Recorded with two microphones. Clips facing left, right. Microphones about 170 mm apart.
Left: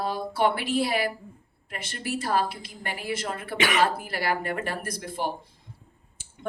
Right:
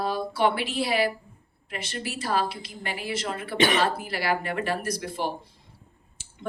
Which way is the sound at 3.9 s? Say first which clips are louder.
Right 1 dB; 50° left (ahead or behind).